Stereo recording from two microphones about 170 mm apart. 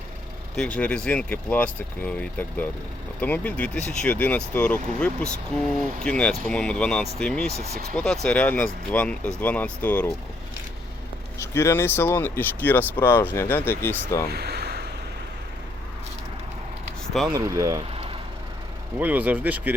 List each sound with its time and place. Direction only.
0.5 s speech: 5° left (ahead or behind)
11.5 s speech: 15° left (ahead or behind)
14.3 s a sound: 70° right (ahead or behind)
17.2 s speech: 20° right (ahead or behind)
17.9 s vehicle: 35° right (ahead or behind)
18.9 s speech: 10° right (ahead or behind)